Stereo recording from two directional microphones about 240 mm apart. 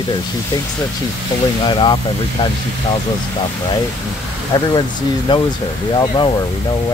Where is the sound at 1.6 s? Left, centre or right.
Centre.